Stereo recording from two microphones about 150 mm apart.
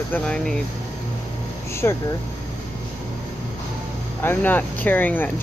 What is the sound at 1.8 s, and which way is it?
Speech, 20° left (ahead or behind).